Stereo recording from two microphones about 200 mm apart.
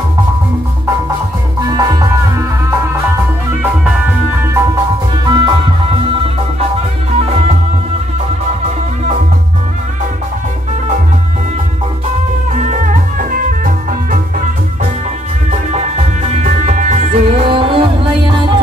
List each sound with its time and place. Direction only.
1.8 s music: 20° right (ahead or behind)
5.2 s music: 20° right (ahead or behind)
7.2 s music: 30° right (ahead or behind)
12.5 s music: 40° right (ahead or behind)
16.4 s music: 40° right (ahead or behind)